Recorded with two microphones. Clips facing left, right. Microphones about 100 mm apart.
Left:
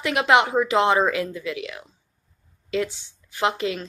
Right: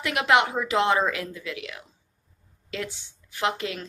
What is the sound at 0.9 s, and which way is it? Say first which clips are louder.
Speech: left 3 dB; 20° left (ahead or behind).